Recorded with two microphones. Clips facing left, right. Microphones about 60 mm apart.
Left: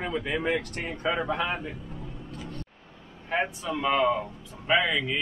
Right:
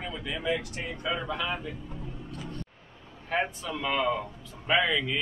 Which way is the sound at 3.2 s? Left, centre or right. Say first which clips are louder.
Left 1 dB; centre.